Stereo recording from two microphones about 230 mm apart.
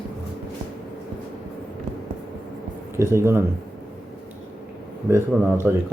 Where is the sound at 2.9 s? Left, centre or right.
Centre.